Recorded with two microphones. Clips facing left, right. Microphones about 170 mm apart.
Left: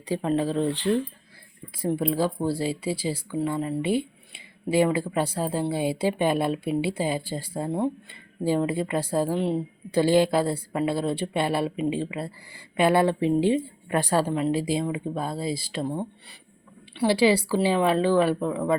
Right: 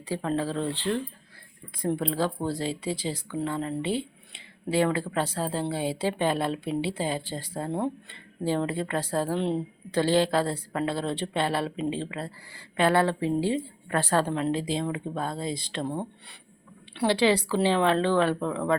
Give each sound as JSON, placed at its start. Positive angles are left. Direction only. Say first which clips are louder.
{"t": 0.1, "sound": "speech", "louder": "left 4 dB", "side_deg": 15}